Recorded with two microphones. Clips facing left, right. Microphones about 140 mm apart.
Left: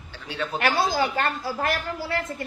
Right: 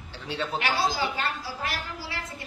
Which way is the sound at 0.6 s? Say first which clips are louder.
Left 5 dB; 55° left (ahead or behind).